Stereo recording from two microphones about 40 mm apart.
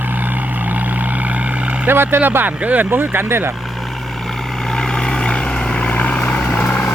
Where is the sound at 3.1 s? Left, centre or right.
Right.